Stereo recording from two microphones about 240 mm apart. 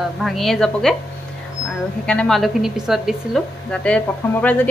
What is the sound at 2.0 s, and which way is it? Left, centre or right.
A woman's voice, centre.